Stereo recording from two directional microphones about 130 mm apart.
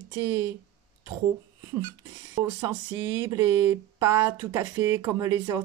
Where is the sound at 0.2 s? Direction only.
15° right (ahead or behind).